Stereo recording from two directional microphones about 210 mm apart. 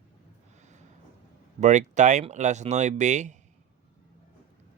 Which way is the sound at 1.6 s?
35° right (ahead or behind).